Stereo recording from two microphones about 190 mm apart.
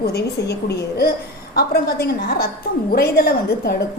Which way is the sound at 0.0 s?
55° left (ahead or behind).